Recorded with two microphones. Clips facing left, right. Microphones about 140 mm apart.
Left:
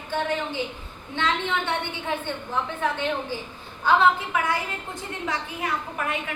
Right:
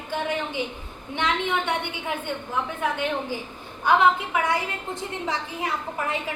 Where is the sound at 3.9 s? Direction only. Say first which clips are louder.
Even; 15° right (ahead or behind).